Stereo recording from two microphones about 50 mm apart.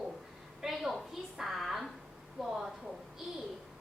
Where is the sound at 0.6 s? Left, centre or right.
Centre.